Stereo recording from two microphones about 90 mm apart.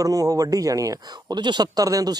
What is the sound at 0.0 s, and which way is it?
Speech, 40° right (ahead or behind).